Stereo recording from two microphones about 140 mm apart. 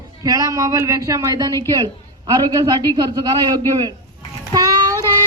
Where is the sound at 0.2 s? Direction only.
25° right (ahead or behind).